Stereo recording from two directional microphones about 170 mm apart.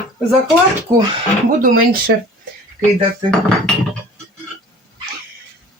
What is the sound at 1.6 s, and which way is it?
Speech, 55° right (ahead or behind).